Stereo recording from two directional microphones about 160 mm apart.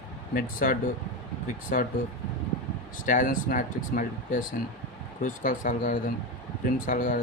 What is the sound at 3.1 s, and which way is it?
Speech, 55° left (ahead or behind).